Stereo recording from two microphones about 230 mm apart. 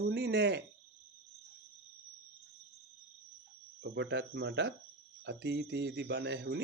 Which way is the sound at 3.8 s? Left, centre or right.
Right.